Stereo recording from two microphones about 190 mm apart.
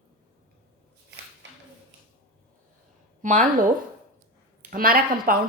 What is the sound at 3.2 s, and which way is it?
Speech, 40° right (ahead or behind).